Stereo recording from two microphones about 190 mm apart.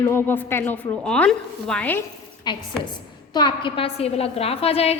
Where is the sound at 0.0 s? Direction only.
10° left (ahead or behind).